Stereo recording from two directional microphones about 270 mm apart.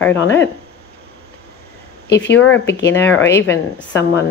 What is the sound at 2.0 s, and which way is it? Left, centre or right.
Speech, left.